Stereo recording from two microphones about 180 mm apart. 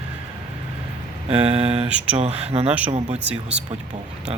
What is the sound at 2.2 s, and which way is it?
Speech, 35° right (ahead or behind).